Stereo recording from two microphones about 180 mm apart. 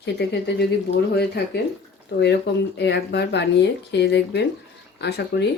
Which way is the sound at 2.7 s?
70° left (ahead or behind).